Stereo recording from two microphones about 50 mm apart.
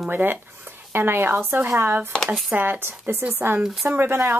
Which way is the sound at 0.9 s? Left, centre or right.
Right.